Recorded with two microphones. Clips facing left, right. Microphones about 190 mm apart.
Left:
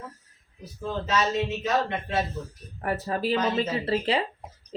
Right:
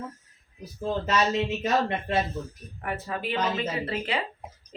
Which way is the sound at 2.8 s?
35° left (ahead or behind).